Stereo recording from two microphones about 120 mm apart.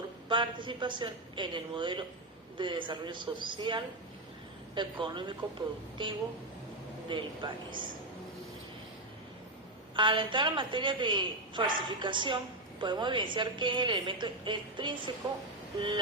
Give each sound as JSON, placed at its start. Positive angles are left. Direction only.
{"t": 0.3, "sound": "a woman's voice", "side_deg": -45}
{"t": 9.9, "sound": "a woman's voice", "side_deg": -45}